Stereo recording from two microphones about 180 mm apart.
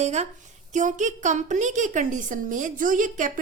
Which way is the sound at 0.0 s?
40° right (ahead or behind).